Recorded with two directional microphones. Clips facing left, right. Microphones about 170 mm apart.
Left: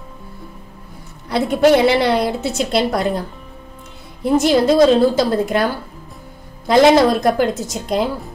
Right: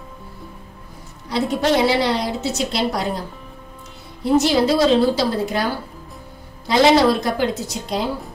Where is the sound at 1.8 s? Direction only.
60° left (ahead or behind).